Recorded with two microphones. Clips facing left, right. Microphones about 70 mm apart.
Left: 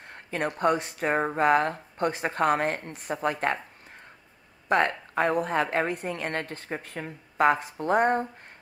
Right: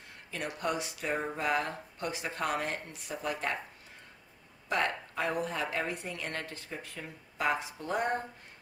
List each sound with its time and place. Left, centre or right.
0.0 s a woman's voice: left
4.6 s a woman's voice: left